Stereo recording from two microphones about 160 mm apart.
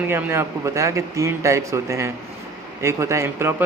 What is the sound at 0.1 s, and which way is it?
Speech, 15° right (ahead or behind).